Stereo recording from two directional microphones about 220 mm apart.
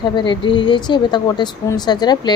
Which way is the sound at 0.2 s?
20° left (ahead or behind).